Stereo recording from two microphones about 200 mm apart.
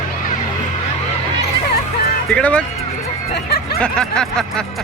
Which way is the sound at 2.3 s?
5° left (ahead or behind).